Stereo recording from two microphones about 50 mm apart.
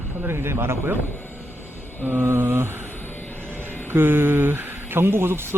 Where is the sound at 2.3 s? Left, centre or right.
Right.